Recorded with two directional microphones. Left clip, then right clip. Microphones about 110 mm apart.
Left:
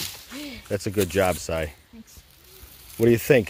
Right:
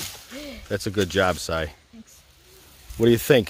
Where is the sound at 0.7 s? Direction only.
5° right (ahead or behind).